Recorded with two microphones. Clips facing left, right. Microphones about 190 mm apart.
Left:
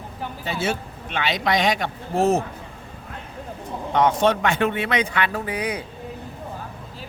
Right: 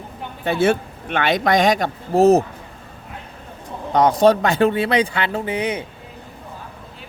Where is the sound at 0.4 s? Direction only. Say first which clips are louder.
Right 9 dB; 55° right (ahead or behind); by 2.4 s 40° right (ahead or behind).